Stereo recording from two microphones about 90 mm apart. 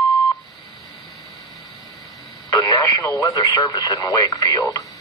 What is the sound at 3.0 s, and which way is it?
Speech, 40° left (ahead or behind).